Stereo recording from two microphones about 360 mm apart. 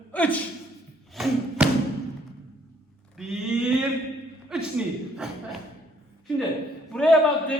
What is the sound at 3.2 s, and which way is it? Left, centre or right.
Speech, centre.